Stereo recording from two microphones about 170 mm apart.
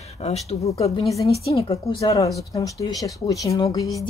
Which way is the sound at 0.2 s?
40° left (ahead or behind).